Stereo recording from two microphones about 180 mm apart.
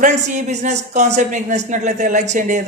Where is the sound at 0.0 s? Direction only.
40° right (ahead or behind).